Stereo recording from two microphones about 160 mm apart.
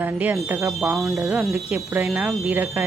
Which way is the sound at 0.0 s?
10° right (ahead or behind).